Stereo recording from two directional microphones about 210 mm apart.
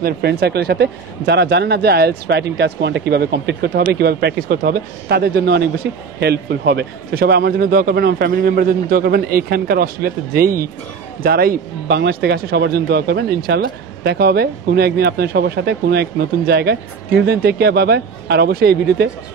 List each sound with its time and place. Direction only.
0.0 s speech: 50° right (ahead or behind)